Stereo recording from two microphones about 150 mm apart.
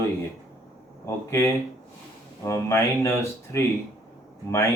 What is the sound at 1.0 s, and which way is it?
Speech, 15° left (ahead or behind).